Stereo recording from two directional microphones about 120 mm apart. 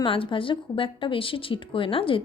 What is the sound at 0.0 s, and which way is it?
Speech, 45° left (ahead or behind).